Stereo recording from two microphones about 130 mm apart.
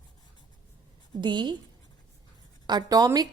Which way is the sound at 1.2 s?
35° right (ahead or behind).